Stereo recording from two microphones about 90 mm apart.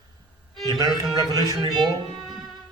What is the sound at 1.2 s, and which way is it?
Speech, 50° right (ahead or behind).